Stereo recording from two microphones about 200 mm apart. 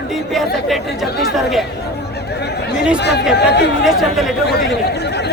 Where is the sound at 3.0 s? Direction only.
55° left (ahead or behind).